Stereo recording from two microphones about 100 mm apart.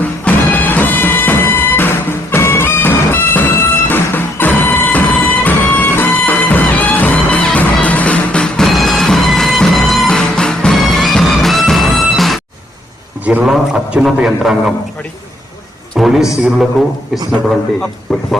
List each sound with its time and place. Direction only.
0.0 s music: 15° left (ahead or behind); by 12.4 s centre (ahead or behind)
13.4 s a man's voice: 5° right (ahead or behind)
16.0 s a man's voice: 5° right (ahead or behind)
18.1 s a man's voice: 5° left (ahead or behind)